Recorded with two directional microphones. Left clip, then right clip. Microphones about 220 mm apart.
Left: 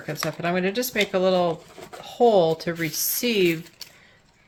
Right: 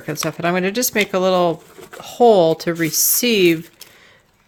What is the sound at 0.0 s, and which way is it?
Speech, 60° right (ahead or behind).